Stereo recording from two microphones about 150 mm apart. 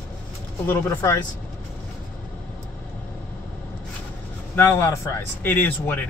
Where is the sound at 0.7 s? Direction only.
15° left (ahead or behind).